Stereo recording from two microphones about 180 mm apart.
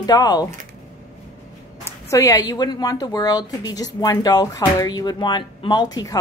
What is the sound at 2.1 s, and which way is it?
A woman's voice, 20° left (ahead or behind).